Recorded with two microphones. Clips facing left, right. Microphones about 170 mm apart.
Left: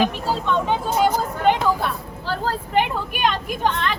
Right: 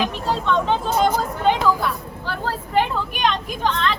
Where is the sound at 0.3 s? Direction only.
10° left (ahead or behind).